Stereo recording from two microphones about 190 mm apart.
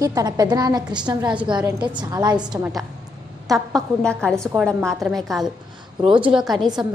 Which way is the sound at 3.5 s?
Centre (ahead or behind).